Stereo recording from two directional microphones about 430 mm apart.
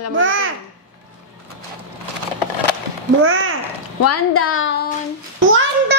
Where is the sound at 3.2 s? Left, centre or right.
Right.